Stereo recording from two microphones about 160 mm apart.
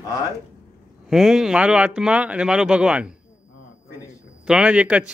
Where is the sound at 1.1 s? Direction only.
Centre (ahead or behind).